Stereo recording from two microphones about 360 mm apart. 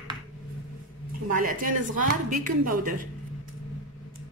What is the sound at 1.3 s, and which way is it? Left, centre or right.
Speech, right.